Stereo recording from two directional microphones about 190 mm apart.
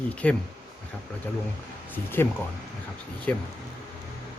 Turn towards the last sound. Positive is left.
turn(degrees=5)  # may be behind; listen again after turning